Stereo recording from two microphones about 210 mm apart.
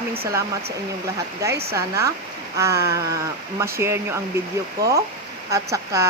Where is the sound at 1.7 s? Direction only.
15° right (ahead or behind).